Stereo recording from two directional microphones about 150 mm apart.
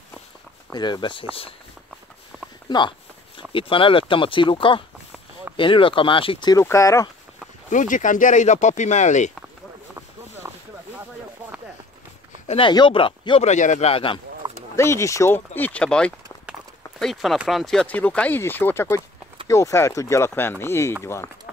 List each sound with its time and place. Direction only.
0.7 s speech: 30° left (ahead or behind)
3.5 s speech: 35° left (ahead or behind)
6.5 s speech: 20° left (ahead or behind)
7.7 s speech: 55° left (ahead or behind)
12.4 s speech: 35° left (ahead or behind)
13.5 s speech: 55° left (ahead or behind); by 14.2 s 35° left (ahead or behind)
14.4 s a sound: 25° right (ahead or behind)
14.8 s speech: 20° left (ahead or behind)